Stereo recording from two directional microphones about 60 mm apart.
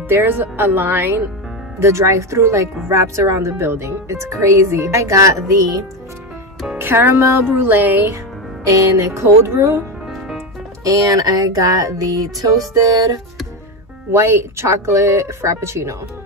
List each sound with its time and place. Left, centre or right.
0.1 s speech: right
1.8 s speech: right
6.8 s speech: right
7.4 s speech: right
8.6 s speech: right
10.8 s music: right
14.1 s speech: right